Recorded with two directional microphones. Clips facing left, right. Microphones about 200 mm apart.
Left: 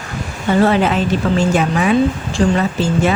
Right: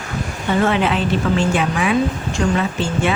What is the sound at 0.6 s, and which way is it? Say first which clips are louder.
Speech: left 4 dB; 40° left (ahead or behind).